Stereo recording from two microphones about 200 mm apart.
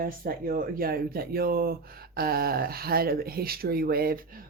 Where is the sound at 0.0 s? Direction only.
45° right (ahead or behind).